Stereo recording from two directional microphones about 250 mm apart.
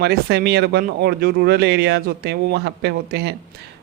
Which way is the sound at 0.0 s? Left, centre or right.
Right.